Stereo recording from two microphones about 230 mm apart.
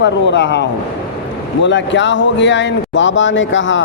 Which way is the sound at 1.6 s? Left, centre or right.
Left.